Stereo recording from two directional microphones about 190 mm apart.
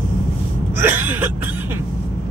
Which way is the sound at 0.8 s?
10° right (ahead or behind).